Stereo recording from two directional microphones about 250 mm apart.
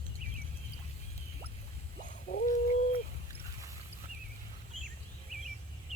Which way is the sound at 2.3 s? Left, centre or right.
Left.